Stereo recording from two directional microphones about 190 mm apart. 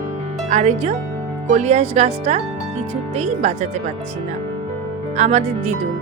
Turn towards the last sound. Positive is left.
turn(degrees=-40)  # may be behind; listen again after turning